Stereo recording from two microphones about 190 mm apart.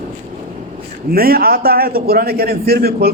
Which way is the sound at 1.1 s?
50° right (ahead or behind).